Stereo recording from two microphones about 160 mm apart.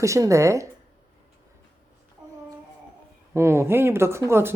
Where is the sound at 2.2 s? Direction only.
5° right (ahead or behind).